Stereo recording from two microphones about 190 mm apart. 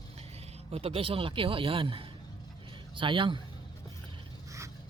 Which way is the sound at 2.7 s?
25° right (ahead or behind).